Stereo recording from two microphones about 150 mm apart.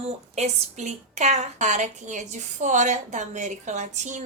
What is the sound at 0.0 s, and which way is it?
A woman's voice, 45° right (ahead or behind).